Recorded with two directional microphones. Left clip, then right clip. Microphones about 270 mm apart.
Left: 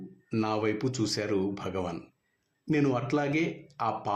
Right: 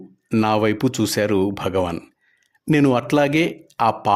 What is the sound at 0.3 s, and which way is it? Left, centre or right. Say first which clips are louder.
Speech: right 11 dB; right.